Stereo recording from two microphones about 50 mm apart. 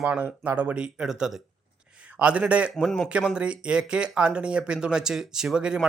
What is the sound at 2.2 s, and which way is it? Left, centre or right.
Speech, right.